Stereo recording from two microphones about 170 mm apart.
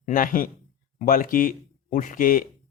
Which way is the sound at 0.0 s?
55° left (ahead or behind).